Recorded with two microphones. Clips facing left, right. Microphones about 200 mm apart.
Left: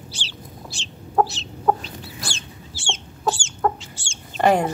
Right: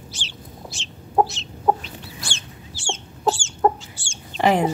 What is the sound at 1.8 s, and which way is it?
Chicken, 35° left (ahead or behind).